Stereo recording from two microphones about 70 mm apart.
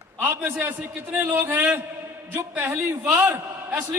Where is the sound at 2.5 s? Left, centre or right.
Right.